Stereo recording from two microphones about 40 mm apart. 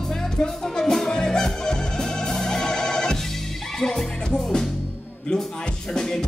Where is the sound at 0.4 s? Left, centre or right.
Centre.